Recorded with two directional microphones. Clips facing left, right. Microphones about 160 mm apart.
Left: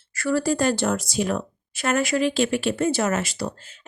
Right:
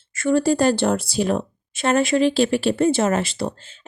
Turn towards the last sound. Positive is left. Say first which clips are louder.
# right 3 dB
turn(degrees=-30)  # may be behind; listen again after turning